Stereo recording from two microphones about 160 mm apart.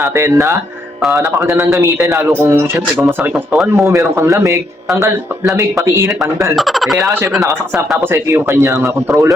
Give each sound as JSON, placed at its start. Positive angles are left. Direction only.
{"t": 0.0, "sound": "speech", "side_deg": -15}
{"t": 1.1, "sound": "mantra", "side_deg": -20}
{"t": 1.8, "sound": "speech", "side_deg": -15}
{"t": 3.5, "sound": "speech", "side_deg": 0}
{"t": 3.8, "sound": "speech", "side_deg": -20}
{"t": 5.8, "sound": "speech", "side_deg": -15}
{"t": 6.6, "sound": "speech", "side_deg": 0}
{"t": 8.1, "sound": "speech", "side_deg": -15}